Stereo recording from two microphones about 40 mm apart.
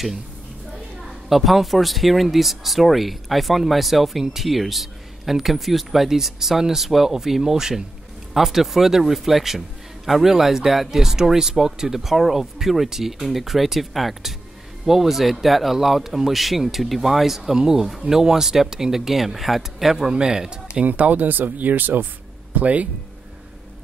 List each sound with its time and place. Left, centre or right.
1.3 s speech: centre
20.1 s speech: centre
20.8 s speech: right
22.5 s speech: right